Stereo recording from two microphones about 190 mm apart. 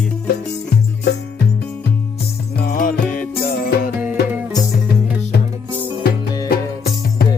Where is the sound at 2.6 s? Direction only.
50° left (ahead or behind).